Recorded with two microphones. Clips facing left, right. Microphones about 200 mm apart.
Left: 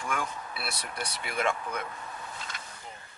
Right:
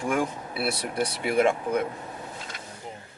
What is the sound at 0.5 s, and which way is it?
Speech, 10° right (ahead or behind).